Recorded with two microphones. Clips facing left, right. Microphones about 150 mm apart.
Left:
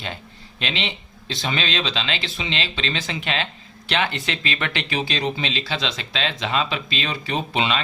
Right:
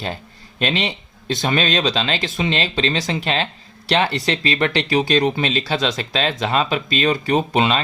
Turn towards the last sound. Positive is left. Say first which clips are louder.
# right 5 dB
turn(degrees=-40)  # may be behind; listen again after turning